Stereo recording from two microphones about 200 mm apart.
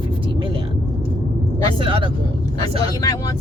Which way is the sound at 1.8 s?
25° right (ahead or behind).